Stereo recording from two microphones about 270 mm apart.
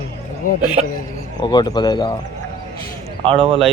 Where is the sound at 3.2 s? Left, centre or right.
Centre.